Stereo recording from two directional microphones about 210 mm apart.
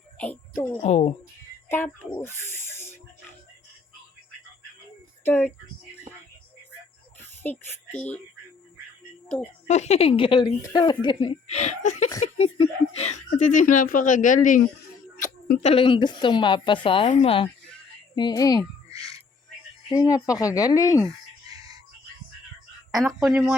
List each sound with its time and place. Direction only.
0.2 s speech: 10° left (ahead or behind)
0.8 s speech: 30° left (ahead or behind)
2.2 s speech: 10° left (ahead or behind)
5.2 s speech: 10° left (ahead or behind)
7.4 s speech: 5° left (ahead or behind)
9.6 s speech: 30° left (ahead or behind)
15.1 s a sound: 40° left (ahead or behind)
15.7 s speech: 25° left (ahead or behind)
18.9 s music: 15° right (ahead or behind)
19.9 s speech: 15° left (ahead or behind)
21.5 s music: 15° right (ahead or behind)
22.9 s speech: 15° right (ahead or behind)
23.2 s speech: centre (ahead or behind)